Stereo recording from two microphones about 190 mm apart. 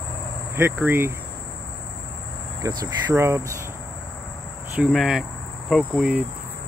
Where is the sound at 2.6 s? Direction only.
20° right (ahead or behind).